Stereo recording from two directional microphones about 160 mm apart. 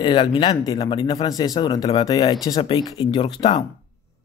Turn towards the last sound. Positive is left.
turn(degrees=30)  # may be behind; listen again after turning